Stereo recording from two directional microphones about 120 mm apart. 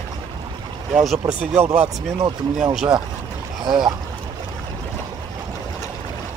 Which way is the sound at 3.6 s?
40° right (ahead or behind).